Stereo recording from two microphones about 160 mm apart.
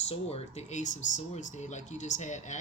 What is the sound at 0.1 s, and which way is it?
Speech, 40° left (ahead or behind).